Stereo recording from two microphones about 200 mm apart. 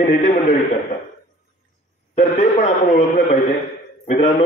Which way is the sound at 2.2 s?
35° left (ahead or behind).